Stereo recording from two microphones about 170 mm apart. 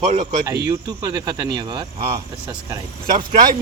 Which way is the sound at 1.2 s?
20° right (ahead or behind).